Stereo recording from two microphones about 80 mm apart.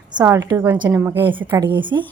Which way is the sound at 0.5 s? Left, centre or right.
Right.